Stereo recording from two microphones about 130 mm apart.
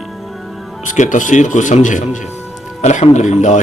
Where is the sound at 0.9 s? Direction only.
70° left (ahead or behind).